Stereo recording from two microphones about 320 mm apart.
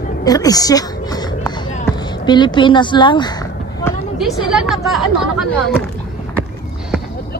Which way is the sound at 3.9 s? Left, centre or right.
Centre.